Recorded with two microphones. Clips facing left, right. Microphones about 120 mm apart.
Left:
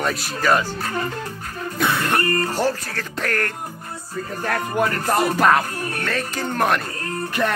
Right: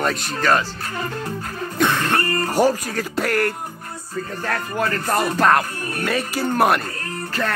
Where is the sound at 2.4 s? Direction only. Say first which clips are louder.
Right 4 dB; 15° right (ahead or behind).